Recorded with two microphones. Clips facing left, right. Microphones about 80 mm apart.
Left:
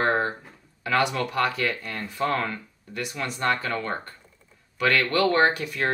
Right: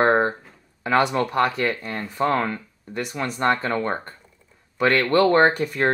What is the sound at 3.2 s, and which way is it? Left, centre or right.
Speech, right.